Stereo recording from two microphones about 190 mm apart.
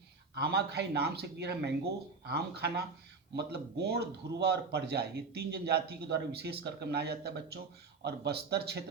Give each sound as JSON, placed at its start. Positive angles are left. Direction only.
{"t": 0.3, "sound": "a man's voice", "side_deg": -60}